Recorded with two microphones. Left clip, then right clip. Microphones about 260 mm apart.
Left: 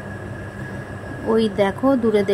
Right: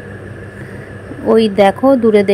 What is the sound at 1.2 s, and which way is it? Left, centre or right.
A woman's voice, centre.